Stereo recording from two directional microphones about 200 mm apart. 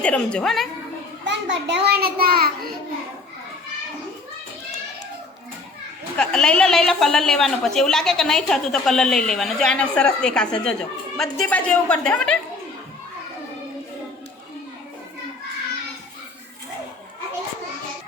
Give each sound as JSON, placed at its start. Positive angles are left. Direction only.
{"t": 0.0, "sound": "a woman's voice", "side_deg": 5}
{"t": 1.2, "sound": "a child's voice", "side_deg": -60}
{"t": 6.1, "sound": "a woman's voice", "side_deg": 5}